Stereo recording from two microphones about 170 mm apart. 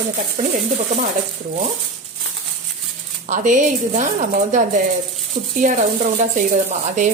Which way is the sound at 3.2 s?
45° right (ahead or behind).